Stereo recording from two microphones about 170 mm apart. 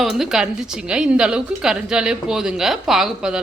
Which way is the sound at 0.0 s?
Centre (ahead or behind).